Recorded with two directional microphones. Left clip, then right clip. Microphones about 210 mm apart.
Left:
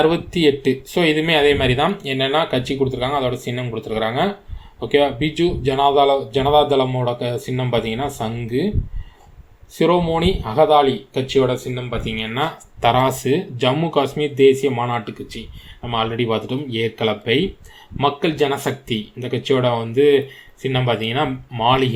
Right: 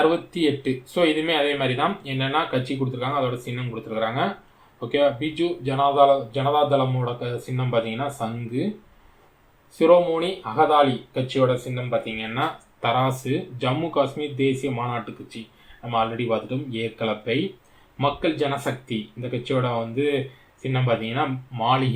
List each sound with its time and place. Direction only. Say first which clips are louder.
0.1 s speech: left 5 dB; 40° left (ahead or behind)
9.7 s speech: even; 40° left (ahead or behind)